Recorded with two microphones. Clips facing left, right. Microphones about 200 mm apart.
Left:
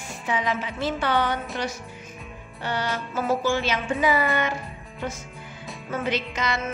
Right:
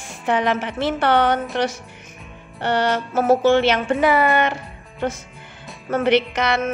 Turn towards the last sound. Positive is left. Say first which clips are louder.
# right 7 dB
turn(degrees=-70)  # may be behind; listen again after turning